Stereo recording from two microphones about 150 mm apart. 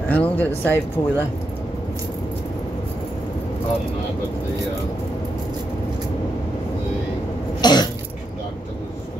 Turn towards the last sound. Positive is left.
turn(degrees=30)  # may be behind; listen again after turning